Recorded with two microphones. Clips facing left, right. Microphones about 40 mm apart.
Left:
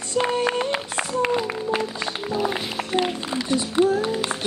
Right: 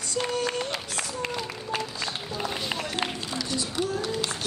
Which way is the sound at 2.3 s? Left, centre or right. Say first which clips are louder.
Left 7 dB; left.